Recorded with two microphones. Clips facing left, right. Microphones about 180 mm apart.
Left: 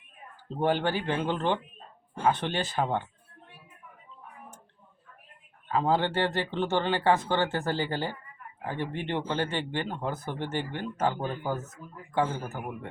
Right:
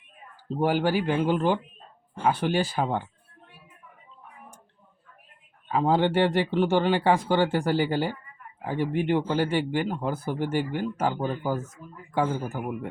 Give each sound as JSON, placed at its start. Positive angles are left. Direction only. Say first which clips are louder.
{"t": 0.4, "sound": "speech", "louder": "right 3 dB", "side_deg": -10}
{"t": 5.6, "sound": "speech", "louder": "right 3 dB", "side_deg": -15}